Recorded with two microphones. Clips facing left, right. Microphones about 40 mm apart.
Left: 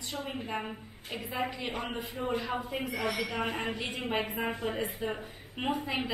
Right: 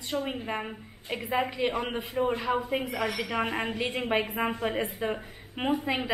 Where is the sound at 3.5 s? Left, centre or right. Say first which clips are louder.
Right 4 dB; right.